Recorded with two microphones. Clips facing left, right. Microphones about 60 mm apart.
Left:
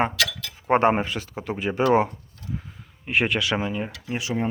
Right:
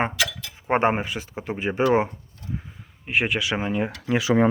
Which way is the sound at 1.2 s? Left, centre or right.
Right.